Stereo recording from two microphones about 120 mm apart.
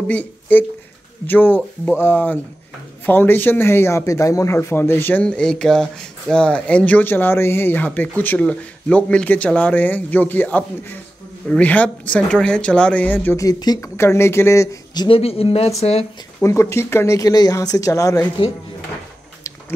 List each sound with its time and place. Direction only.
0.1 s speech: 15° left (ahead or behind)
13.4 s speech: 35° left (ahead or behind)
13.9 s speech: 20° left (ahead or behind)
15.0 s speech: 55° left (ahead or behind)
16.4 s speech: 25° left (ahead or behind)